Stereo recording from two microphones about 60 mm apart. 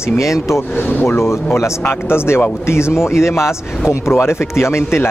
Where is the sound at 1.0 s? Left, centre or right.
Left.